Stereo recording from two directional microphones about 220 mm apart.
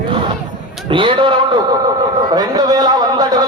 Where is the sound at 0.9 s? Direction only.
20° right (ahead or behind).